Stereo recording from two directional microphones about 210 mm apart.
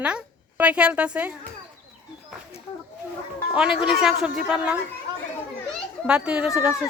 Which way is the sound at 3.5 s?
5° right (ahead or behind).